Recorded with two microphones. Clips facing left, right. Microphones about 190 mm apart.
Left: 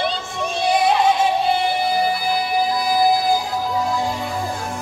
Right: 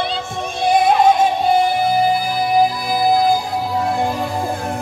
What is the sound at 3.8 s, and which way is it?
Music, 55° right (ahead or behind).